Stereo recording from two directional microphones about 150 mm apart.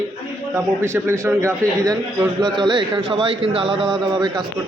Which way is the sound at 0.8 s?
20° right (ahead or behind).